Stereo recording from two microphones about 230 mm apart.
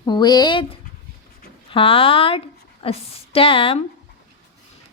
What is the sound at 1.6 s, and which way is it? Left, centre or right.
A woman's voice, left.